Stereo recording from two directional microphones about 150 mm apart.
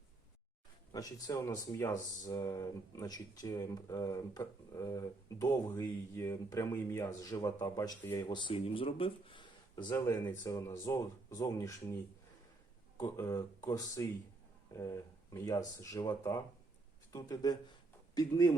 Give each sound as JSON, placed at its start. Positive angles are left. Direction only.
{"t": 0.9, "sound": "speech", "side_deg": 25}
{"t": 13.0, "sound": "speech", "side_deg": 20}